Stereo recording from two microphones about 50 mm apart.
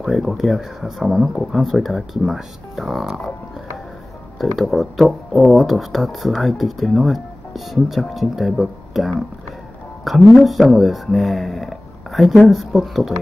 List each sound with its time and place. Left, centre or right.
0.0 s speech: centre
4.4 s speech: centre